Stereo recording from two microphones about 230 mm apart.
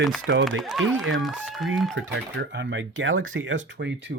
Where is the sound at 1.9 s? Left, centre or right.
Right.